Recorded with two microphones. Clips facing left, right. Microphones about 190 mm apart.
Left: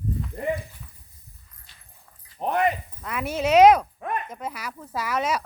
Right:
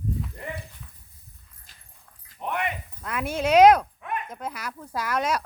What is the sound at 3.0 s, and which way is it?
Speech, centre (ahead or behind).